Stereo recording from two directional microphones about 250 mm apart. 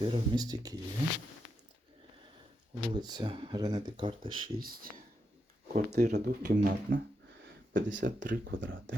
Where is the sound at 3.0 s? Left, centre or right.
Centre.